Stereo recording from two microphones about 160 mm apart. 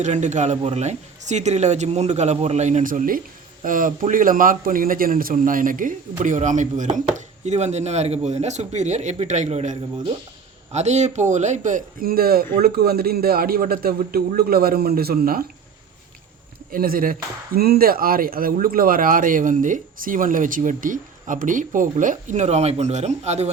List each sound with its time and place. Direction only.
0.0 s speech: 50° right (ahead or behind); by 15.4 s 70° right (ahead or behind)
16.7 s speech: 65° right (ahead or behind); by 23.5 s 45° right (ahead or behind)